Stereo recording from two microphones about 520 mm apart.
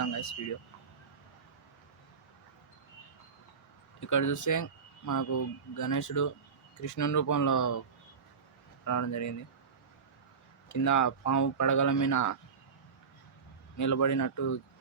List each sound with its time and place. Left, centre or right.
0.0 s a sound: left
4.0 s speech: left
8.8 s speech: left
10.7 s speech: left
13.7 s speech: left